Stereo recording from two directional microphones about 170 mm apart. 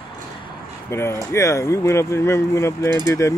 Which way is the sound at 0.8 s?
15° left (ahead or behind).